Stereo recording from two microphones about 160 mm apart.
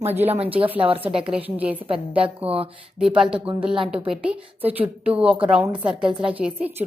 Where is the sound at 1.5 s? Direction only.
10° right (ahead or behind).